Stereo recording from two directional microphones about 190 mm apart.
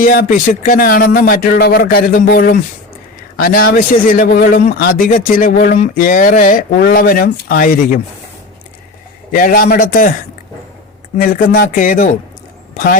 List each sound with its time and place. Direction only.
0.0 s speech: 50° left (ahead or behind)
9.3 s speech: 50° left (ahead or behind)
11.2 s speech: 45° left (ahead or behind)